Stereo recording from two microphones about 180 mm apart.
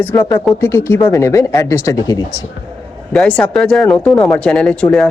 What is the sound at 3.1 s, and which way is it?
Speech, 5° left (ahead or behind).